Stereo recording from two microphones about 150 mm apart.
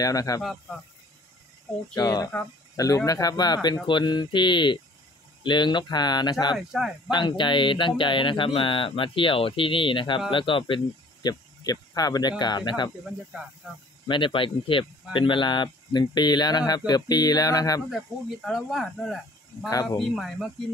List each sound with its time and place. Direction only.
0.0 s speech: 25° left (ahead or behind)
2.0 s speech: 25° left (ahead or behind)
6.5 s speech: 5° right (ahead or behind)
7.1 s speech: 30° left (ahead or behind)
11.2 s speech: 25° left (ahead or behind)
14.0 s speech: 35° left (ahead or behind)
17.8 s speech: centre (ahead or behind)
19.7 s speech: 25° left (ahead or behind)
20.0 s speech: centre (ahead or behind)